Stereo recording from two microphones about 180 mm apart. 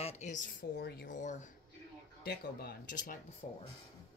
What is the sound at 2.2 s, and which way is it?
Speech, 60° left (ahead or behind).